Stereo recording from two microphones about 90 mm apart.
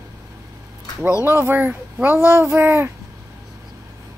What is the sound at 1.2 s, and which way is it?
Speech, 25° right (ahead or behind).